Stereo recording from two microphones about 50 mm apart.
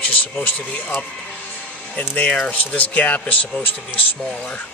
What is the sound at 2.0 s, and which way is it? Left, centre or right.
Speech, left.